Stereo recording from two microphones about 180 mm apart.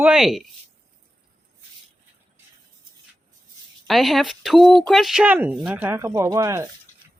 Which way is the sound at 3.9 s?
Centre (ahead or behind).